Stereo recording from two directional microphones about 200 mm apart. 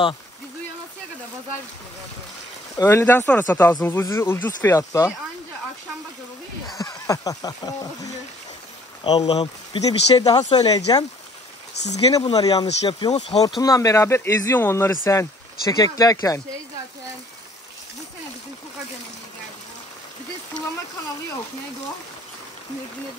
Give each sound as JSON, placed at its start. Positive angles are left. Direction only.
{"t": 2.7, "sound": "speech", "side_deg": 15}
{"t": 6.8, "sound": "speech", "side_deg": 15}
{"t": 11.8, "sound": "speech", "side_deg": 35}
{"t": 12.4, "sound": "speech", "side_deg": 20}
{"t": 13.6, "sound": "speech", "side_deg": 15}